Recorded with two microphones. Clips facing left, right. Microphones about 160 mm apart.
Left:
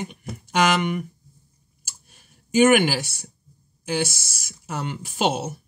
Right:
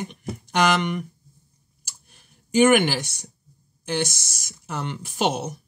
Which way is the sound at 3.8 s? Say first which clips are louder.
Left 1 dB; 10° left (ahead or behind).